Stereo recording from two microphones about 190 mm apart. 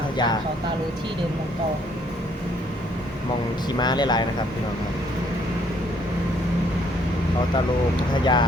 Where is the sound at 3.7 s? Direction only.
20° left (ahead or behind).